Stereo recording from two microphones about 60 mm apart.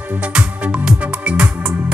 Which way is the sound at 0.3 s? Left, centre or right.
Centre.